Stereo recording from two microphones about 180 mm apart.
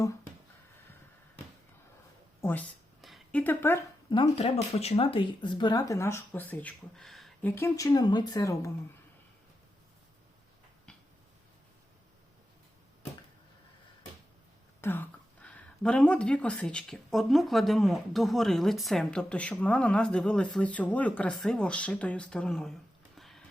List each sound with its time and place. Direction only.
2.4 s speech: 10° left (ahead or behind)
3.0 s a sound: centre (ahead or behind)
3.4 s speech: 10° left (ahead or behind)
4.1 s speech: 30° left (ahead or behind); by 7.5 s centre (ahead or behind)
7.5 s speech: 15° left (ahead or behind)
14.8 s speech: 10° left (ahead or behind)
23.1 s horse: centre (ahead or behind)